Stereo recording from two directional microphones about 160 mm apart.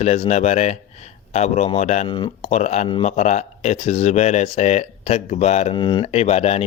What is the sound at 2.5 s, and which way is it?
Speech, 45° left (ahead or behind).